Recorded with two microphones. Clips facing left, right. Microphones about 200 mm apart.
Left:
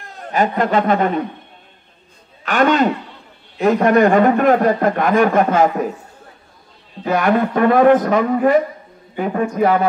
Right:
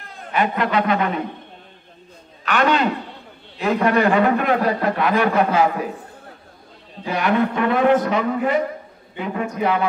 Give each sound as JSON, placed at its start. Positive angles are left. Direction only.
{"t": 0.0, "sound": "a man's voice", "side_deg": 45}
{"t": 2.4, "sound": "a man's voice", "side_deg": 45}
{"t": 7.1, "sound": "a man's voice", "side_deg": 50}